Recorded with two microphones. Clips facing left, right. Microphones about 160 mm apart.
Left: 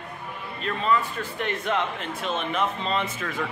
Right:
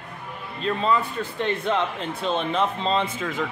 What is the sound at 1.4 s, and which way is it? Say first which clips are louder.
A man's voice: right 3 dB; 30° right (ahead or behind).